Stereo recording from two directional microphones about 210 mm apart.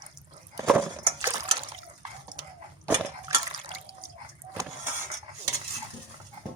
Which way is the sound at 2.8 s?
15° right (ahead or behind).